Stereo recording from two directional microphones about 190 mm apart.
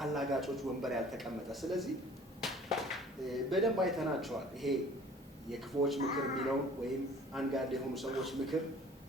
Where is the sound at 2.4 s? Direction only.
Centre (ahead or behind).